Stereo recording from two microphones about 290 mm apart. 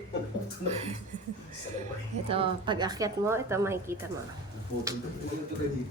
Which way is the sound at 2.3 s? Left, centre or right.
Centre.